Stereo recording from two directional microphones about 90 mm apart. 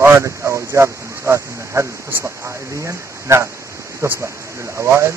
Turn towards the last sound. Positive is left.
turn(degrees=-30)  # may be behind; listen again after turning